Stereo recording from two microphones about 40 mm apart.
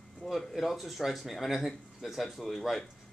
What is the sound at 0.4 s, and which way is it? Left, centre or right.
Speech, centre.